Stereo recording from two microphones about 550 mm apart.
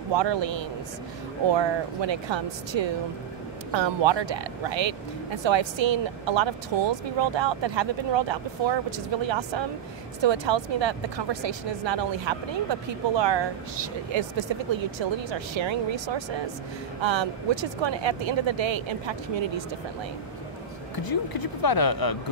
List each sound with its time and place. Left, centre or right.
0.1 s speech: right
17.0 s speech: right
20.9 s speech: left